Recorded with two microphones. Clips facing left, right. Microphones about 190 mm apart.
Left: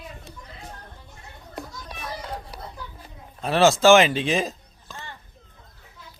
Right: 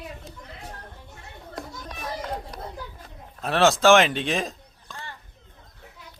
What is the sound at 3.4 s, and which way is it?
Speech, centre (ahead or behind).